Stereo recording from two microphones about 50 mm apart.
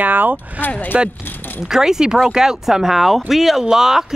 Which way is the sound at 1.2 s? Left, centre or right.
Left.